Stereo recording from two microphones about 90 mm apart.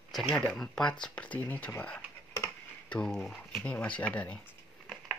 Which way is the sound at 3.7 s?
15° left (ahead or behind).